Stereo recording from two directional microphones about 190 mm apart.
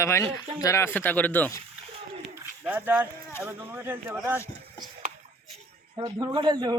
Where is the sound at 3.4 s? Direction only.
10° right (ahead or behind).